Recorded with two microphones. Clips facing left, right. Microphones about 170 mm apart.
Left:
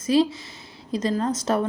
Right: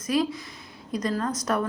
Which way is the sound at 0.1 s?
30° left (ahead or behind).